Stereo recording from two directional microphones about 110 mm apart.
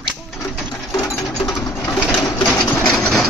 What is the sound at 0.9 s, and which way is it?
Sewing machine, 25° left (ahead or behind).